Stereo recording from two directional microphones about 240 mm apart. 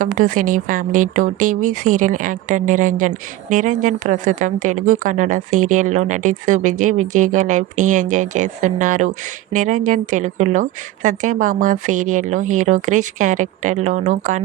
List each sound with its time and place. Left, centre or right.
0.2 s speech: right